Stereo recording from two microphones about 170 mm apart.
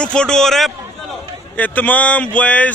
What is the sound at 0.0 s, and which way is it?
A man's voice, 5° left (ahead or behind).